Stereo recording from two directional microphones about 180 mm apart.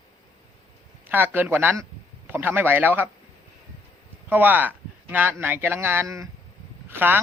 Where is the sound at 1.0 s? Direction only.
10° right (ahead or behind).